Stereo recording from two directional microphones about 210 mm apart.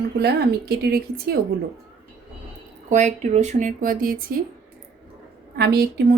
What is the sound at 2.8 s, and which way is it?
A woman's voice, 35° right (ahead or behind).